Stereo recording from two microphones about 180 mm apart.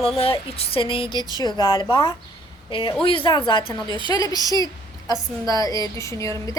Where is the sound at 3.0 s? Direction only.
30° left (ahead or behind).